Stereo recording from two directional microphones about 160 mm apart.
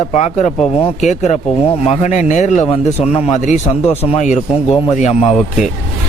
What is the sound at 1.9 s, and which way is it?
A man's voice, 45° left (ahead or behind).